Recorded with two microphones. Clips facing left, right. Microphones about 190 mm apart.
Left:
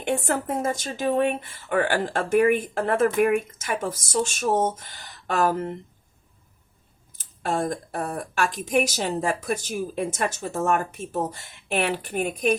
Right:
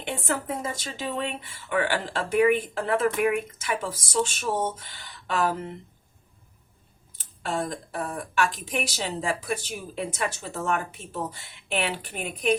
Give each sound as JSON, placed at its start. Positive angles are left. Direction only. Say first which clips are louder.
{"t": 0.0, "sound": "speech", "louder": "left 5 dB", "side_deg": 50}
{"t": 7.2, "sound": "speech", "louder": "left 3 dB", "side_deg": 45}